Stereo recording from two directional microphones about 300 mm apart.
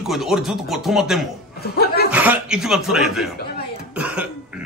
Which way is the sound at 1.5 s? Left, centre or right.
Left.